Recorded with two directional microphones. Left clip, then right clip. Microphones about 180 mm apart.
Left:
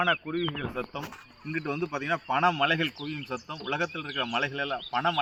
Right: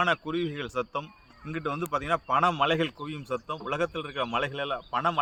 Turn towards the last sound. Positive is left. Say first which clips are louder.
# even
turn(degrees=-35)  # may be behind; listen again after turning